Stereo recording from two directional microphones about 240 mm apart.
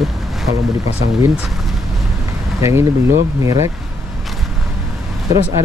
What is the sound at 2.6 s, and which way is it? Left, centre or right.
Speech, centre.